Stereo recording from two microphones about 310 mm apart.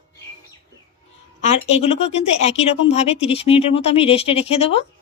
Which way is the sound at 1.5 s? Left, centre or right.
Centre.